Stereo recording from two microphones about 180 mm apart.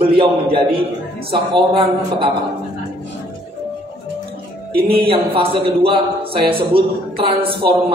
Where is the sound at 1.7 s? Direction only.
30° right (ahead or behind).